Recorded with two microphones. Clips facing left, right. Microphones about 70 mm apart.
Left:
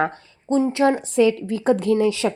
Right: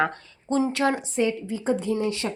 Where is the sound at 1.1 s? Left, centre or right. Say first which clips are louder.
Left 7 dB; left.